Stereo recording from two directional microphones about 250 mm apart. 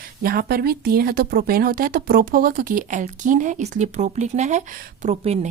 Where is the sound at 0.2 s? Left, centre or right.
Right.